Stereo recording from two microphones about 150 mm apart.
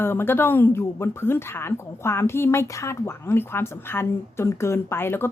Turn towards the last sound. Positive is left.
turn(degrees=15)  # may be behind; listen again after turning